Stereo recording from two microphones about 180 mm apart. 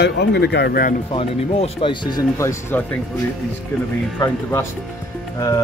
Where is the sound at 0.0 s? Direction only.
65° left (ahead or behind).